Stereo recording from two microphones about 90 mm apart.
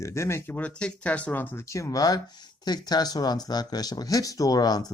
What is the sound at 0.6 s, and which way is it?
Speech, 10° left (ahead or behind).